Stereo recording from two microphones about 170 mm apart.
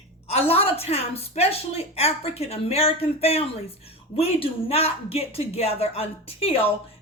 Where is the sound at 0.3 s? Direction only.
35° left (ahead or behind).